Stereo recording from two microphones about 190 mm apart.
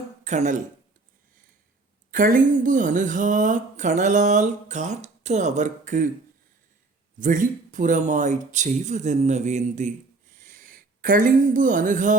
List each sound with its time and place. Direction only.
0.3 s speech: 40° right (ahead or behind)
2.0 s speech: 45° right (ahead or behind)
7.2 s speech: 45° right (ahead or behind)
10.3 s a sound: 45° right (ahead or behind)